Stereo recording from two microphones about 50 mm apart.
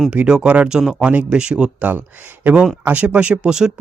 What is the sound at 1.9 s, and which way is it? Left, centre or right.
Speech, right.